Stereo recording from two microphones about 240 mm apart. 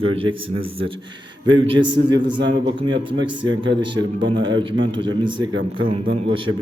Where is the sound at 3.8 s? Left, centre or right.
Centre.